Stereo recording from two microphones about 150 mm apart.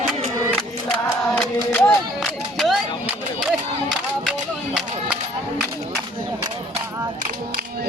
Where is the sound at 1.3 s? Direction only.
10° left (ahead or behind).